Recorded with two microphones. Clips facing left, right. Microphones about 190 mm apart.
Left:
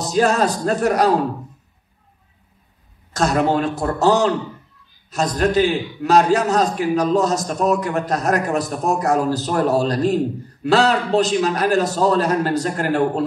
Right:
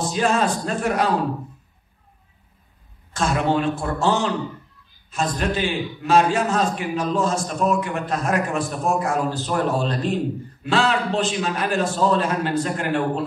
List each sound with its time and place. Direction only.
0.0 s a man's voice: 40° left (ahead or behind)
3.1 s a man's voice: 40° left (ahead or behind)